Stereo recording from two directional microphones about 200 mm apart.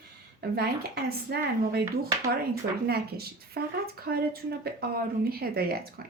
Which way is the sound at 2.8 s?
50° right (ahead or behind).